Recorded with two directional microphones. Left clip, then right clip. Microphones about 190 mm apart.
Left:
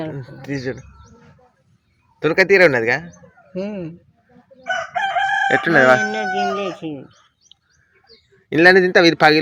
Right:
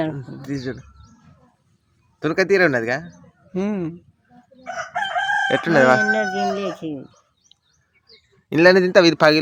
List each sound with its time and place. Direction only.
0.2 s speech: centre (ahead or behind)
2.1 s speech: centre (ahead or behind)
3.5 s speech: 55° right (ahead or behind)
5.0 s crowing: 15° right (ahead or behind)
8.4 s speech: 15° right (ahead or behind)